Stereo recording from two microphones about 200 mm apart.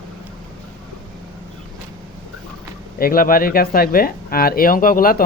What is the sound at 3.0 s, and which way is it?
Speech, 45° left (ahead or behind).